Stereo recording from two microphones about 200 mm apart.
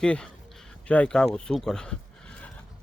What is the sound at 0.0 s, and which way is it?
Speech, 5° left (ahead or behind).